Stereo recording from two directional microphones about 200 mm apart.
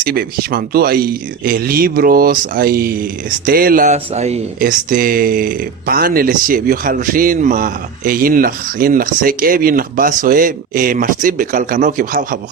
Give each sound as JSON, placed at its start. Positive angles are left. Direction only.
{"t": 0.0, "sound": "speech", "side_deg": -50}